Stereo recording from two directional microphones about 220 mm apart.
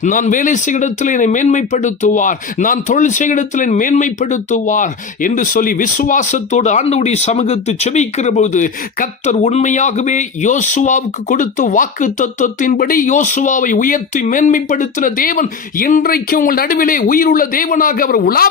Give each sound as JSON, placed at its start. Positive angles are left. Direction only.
{"t": 0.0, "sound": "speech", "side_deg": 35}